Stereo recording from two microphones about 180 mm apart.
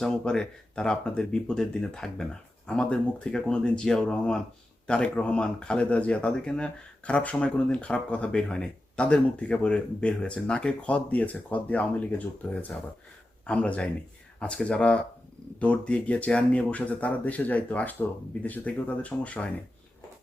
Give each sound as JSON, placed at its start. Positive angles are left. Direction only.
{"t": 0.0, "sound": "speech", "side_deg": 5}